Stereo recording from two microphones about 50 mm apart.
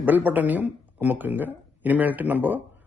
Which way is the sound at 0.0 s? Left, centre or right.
Right.